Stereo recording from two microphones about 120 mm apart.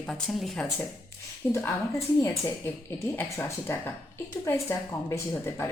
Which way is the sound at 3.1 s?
15° left (ahead or behind).